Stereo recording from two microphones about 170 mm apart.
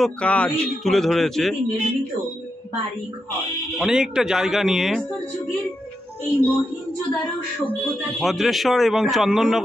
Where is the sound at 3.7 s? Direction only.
5° right (ahead or behind).